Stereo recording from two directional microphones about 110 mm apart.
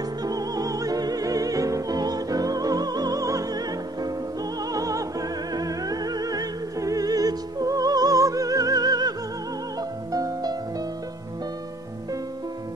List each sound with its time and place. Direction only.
0.2 s opera: 35° right (ahead or behind)
4.7 s music: 35° right (ahead or behind)
10.1 s music: 35° right (ahead or behind)